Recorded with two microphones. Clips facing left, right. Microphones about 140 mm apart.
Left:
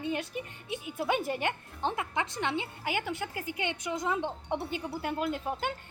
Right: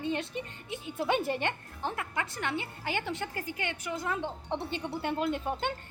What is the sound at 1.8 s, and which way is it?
A woman's voice, 20° left (ahead or behind).